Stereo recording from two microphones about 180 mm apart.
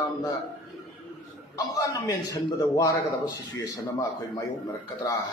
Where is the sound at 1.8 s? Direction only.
20° left (ahead or behind).